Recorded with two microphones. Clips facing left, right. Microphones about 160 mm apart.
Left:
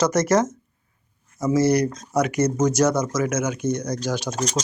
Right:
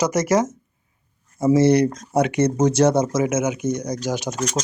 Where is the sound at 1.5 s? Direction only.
25° right (ahead or behind).